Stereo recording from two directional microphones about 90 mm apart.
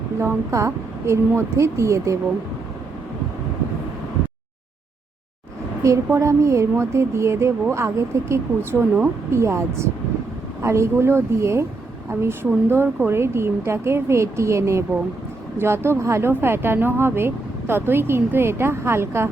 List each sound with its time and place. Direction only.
0.2 s a woman's voice: 30° right (ahead or behind)
5.8 s a woman's voice: 35° right (ahead or behind)